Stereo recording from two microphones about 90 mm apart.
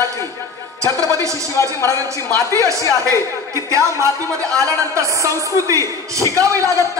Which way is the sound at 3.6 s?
35° right (ahead or behind).